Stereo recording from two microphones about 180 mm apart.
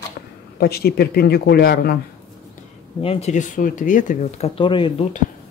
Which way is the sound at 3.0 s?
35° left (ahead or behind).